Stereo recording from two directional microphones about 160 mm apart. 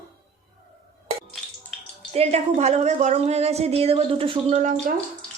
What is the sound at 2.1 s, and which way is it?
A woman's voice, 40° right (ahead or behind).